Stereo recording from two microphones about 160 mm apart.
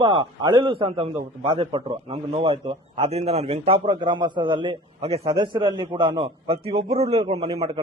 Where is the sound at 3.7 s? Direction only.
30° right (ahead or behind).